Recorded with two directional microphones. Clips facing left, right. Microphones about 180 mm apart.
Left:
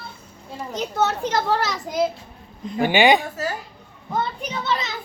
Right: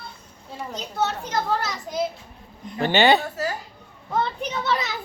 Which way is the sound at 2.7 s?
10° left (ahead or behind).